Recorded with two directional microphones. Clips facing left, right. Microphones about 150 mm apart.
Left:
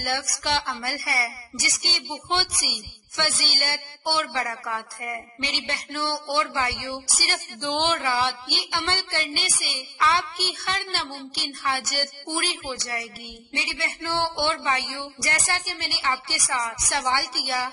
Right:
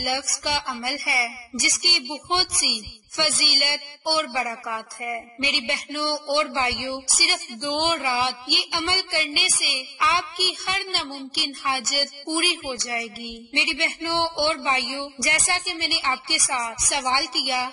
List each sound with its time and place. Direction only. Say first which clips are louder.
0.0 s a woman's voice: right 1 dB; 10° right (ahead or behind)